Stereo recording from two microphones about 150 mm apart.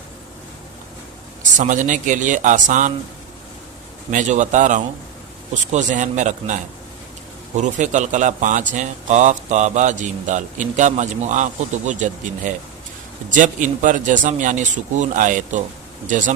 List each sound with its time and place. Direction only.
1.4 s speech: 55° right (ahead or behind)
4.1 s speech: 55° right (ahead or behind)